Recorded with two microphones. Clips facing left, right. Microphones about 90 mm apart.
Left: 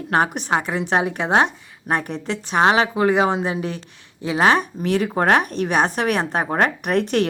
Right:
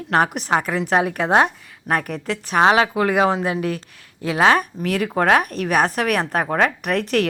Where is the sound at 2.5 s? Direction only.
5° left (ahead or behind).